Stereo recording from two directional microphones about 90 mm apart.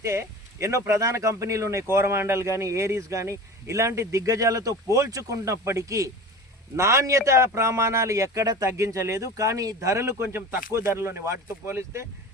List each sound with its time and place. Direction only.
0.0 s speech: 35° right (ahead or behind)